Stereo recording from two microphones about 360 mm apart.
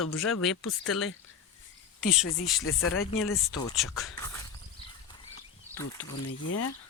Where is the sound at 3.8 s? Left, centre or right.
Centre.